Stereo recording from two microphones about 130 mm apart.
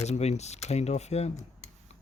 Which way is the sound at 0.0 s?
55° left (ahead or behind).